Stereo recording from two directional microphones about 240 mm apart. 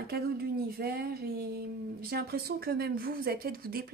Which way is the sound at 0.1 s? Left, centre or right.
Right.